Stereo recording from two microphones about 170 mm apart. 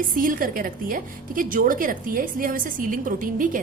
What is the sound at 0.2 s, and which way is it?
A woman's voice, 55° right (ahead or behind).